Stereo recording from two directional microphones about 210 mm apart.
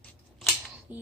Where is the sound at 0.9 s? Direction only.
10° right (ahead or behind).